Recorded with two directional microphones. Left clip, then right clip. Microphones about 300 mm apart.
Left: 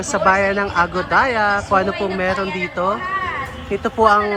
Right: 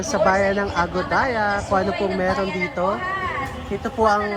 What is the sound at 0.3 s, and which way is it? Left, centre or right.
Speech, centre.